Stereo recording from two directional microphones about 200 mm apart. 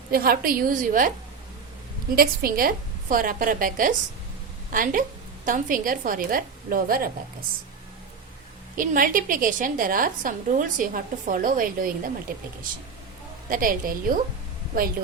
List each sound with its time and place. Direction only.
0.1 s a woman's voice: 50° right (ahead or behind)
8.7 s a woman's voice: 45° right (ahead or behind)
13.5 s a woman's voice: 45° right (ahead or behind)